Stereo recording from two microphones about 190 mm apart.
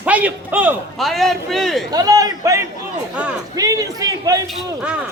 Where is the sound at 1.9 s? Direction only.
20° right (ahead or behind).